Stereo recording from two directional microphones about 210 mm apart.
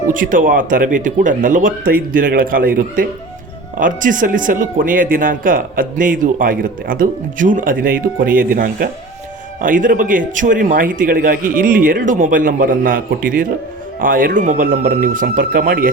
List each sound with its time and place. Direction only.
0.1 s speech: 40° right (ahead or behind)